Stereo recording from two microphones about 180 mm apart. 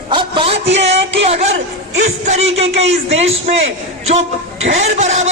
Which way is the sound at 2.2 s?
35° right (ahead or behind).